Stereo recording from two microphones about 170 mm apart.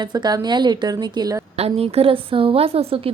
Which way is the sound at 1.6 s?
35° right (ahead or behind).